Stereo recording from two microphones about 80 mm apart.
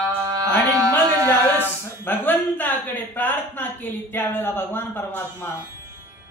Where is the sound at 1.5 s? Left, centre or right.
Left.